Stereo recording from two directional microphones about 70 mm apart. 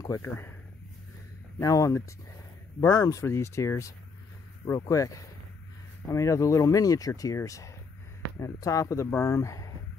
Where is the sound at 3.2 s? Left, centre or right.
Left.